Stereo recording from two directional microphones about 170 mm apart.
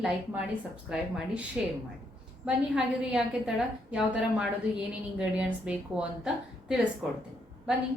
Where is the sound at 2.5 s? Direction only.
5° right (ahead or behind).